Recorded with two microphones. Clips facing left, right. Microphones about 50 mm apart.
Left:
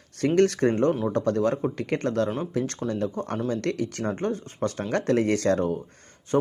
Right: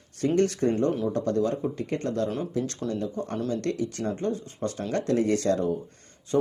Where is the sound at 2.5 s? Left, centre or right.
Left.